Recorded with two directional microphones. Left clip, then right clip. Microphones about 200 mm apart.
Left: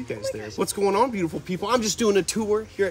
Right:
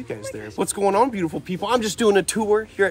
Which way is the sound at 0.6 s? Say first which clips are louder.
Right 3 dB; centre (ahead or behind).